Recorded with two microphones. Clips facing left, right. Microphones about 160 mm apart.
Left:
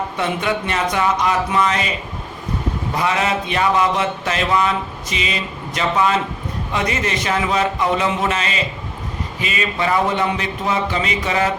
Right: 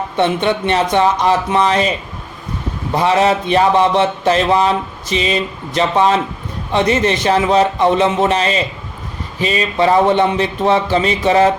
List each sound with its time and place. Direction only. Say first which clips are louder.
0.2 s a man's voice: right 7 dB; 30° right (ahead or behind)
2.9 s a man's voice: right 7 dB; 30° right (ahead or behind)